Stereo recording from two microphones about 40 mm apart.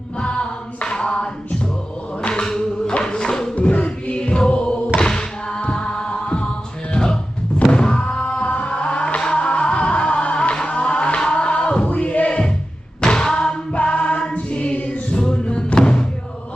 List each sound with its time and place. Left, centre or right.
0.2 s a capella: left
2.4 s a sound: centre
3.0 s music: centre
3.5 s music: left
13.0 s music: centre